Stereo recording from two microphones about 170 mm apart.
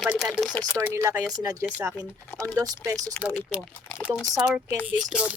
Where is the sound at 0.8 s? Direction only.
15° right (ahead or behind).